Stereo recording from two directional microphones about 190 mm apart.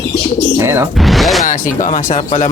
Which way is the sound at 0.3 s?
15° right (ahead or behind).